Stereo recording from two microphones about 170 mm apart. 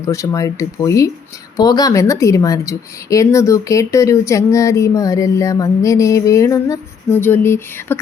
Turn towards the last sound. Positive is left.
turn(degrees=15)  # may be behind; listen again after turning